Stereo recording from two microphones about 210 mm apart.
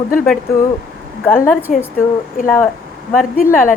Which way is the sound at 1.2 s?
10° left (ahead or behind).